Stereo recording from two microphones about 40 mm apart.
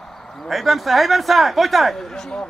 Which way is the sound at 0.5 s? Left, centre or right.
Centre.